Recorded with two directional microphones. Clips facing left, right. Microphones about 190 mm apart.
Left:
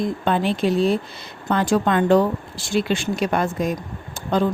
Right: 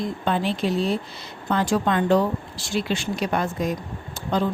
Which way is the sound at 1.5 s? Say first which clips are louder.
Left 3 dB; 50° left (ahead or behind).